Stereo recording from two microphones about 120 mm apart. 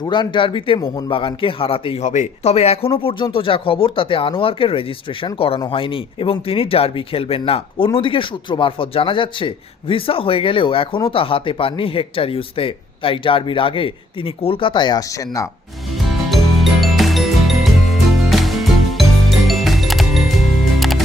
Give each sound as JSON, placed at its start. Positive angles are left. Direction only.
{"t": 0.0, "sound": "speech", "side_deg": 40}
{"t": 0.8, "sound": "speech", "side_deg": 35}
{"t": 1.1, "sound": "speech", "side_deg": 50}
{"t": 2.0, "sound": "speech", "side_deg": 80}
{"t": 16.0, "sound": "music", "side_deg": 0}